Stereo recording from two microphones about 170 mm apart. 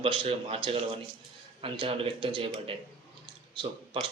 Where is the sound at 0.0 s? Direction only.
35° right (ahead or behind).